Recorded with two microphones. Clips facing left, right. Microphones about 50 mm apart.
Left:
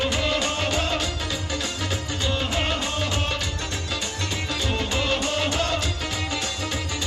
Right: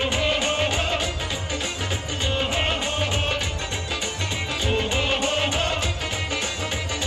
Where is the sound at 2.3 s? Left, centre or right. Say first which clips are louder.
Right 1 dB; right.